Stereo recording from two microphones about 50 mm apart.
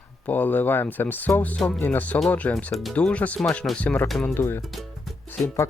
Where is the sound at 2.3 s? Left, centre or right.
Left.